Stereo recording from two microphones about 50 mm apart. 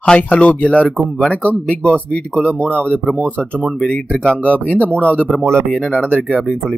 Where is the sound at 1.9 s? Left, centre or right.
Centre.